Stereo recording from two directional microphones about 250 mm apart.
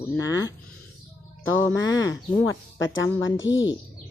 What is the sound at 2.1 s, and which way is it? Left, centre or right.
Speech, left.